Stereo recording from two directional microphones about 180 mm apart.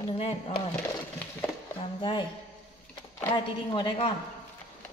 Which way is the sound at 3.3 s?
25° left (ahead or behind).